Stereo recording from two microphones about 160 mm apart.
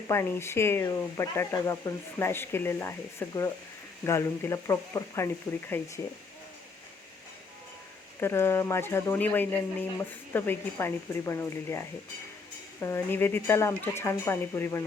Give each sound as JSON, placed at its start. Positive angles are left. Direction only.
{"t": 0.1, "sound": "speech", "side_deg": 15}
{"t": 8.2, "sound": "speech", "side_deg": 15}